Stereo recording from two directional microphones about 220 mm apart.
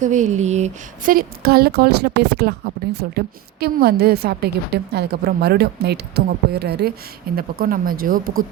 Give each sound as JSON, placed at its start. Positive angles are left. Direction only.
{"t": 0.0, "sound": "speech", "side_deg": -35}